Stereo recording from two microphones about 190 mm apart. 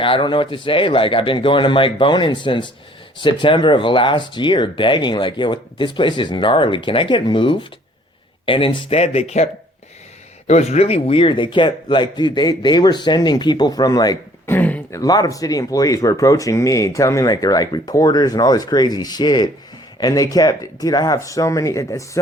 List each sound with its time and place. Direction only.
0.0 s speech: 25° left (ahead or behind)